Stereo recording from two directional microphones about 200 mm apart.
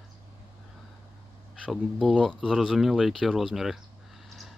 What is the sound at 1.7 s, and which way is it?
Speech, centre (ahead or behind).